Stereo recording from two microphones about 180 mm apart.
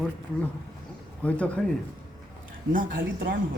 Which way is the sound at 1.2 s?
5° left (ahead or behind).